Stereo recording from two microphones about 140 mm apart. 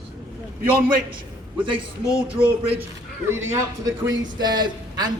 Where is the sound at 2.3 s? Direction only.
45° right (ahead or behind).